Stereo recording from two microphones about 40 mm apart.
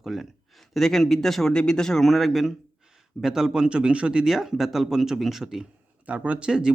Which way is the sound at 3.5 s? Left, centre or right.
Right.